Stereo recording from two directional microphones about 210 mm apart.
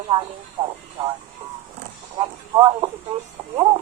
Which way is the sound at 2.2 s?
20° right (ahead or behind).